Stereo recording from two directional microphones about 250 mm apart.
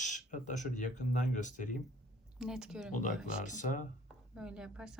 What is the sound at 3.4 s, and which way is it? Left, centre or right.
Speech, left.